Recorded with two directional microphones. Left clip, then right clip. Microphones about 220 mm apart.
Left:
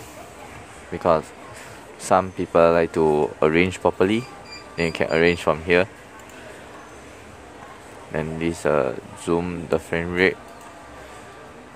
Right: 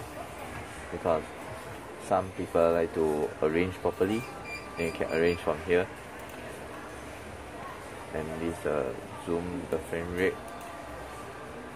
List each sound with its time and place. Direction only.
0.9 s speech: 45° left (ahead or behind)
8.1 s speech: 40° left (ahead or behind)